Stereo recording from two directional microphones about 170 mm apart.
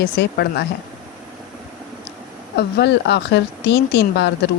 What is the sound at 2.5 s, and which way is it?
Speech, 85° left.